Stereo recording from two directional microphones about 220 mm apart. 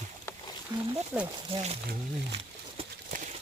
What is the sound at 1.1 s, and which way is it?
Speech, 5° right (ahead or behind).